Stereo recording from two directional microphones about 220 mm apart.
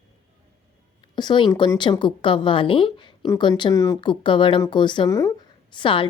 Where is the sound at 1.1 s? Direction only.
20° left (ahead or behind).